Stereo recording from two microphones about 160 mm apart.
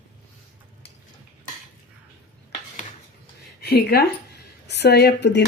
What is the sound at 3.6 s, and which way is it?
Speech, 80° left.